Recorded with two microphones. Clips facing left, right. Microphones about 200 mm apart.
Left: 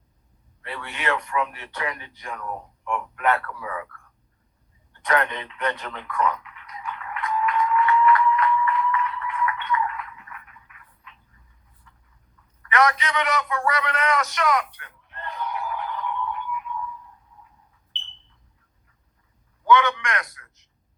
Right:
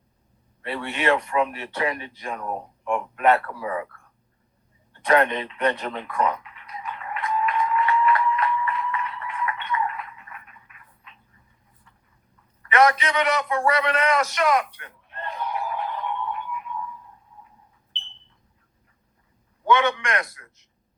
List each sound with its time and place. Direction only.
0.6 s speech: 25° right (ahead or behind)
4.9 s a sound: 30° right (ahead or behind)
19.6 s speech: 25° right (ahead or behind)